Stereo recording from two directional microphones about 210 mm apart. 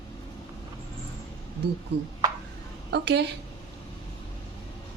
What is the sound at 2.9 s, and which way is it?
Speech, 55° right (ahead or behind).